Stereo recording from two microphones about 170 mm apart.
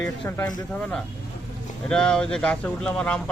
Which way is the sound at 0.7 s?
5° left (ahead or behind).